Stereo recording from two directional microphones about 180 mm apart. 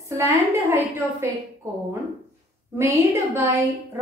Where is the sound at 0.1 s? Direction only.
15° right (ahead or behind).